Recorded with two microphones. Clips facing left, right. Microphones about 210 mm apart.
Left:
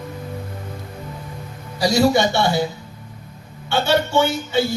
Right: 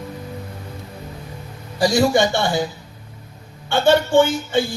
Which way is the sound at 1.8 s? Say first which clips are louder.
Even; 50° right (ahead or behind).